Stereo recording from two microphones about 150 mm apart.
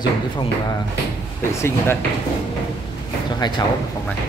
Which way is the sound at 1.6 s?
15° left (ahead or behind).